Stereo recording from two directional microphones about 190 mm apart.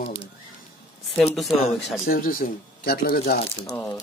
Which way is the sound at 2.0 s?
50° left (ahead or behind).